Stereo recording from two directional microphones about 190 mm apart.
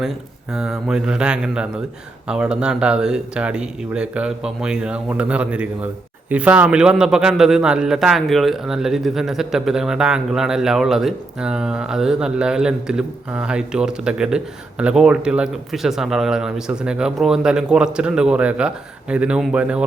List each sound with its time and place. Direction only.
0.5 s a man's voice: 5° right (ahead or behind)